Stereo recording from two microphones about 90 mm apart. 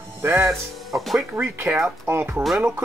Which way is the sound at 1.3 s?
30° right (ahead or behind).